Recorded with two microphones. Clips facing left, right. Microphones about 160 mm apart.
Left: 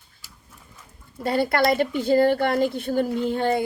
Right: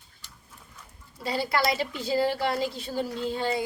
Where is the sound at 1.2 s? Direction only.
55° left (ahead or behind).